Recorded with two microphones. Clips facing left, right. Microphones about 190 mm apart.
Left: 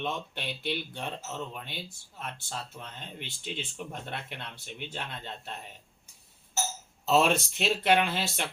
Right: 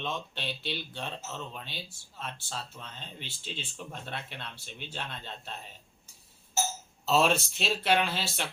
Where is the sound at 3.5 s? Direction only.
15° left (ahead or behind).